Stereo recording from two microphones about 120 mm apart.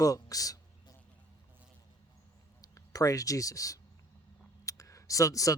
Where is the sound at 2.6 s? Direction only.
30° left (ahead or behind).